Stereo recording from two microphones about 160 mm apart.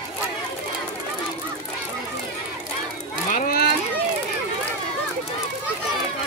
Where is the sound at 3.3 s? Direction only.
65° left (ahead or behind).